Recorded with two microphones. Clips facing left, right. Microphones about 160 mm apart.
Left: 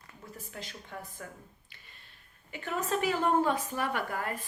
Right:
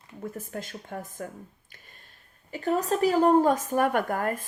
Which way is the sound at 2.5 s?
35° right (ahead or behind).